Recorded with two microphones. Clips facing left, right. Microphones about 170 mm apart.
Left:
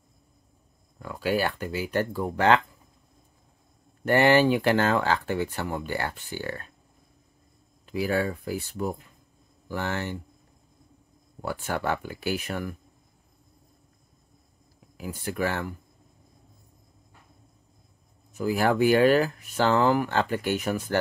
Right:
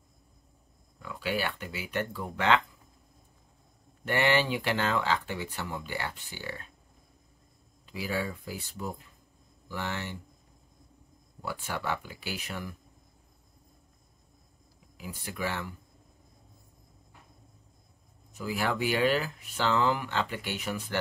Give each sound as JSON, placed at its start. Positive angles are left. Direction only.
{"t": 0.9, "sound": "speech", "side_deg": 45}
{"t": 4.0, "sound": "speech", "side_deg": 45}
{"t": 7.8, "sound": "speech", "side_deg": 55}
{"t": 11.4, "sound": "speech", "side_deg": 50}
{"t": 15.0, "sound": "speech", "side_deg": 50}
{"t": 18.4, "sound": "speech", "side_deg": 50}